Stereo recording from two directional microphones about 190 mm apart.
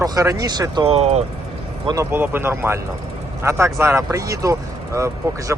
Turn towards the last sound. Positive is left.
turn(degrees=-15)  # may be behind; listen again after turning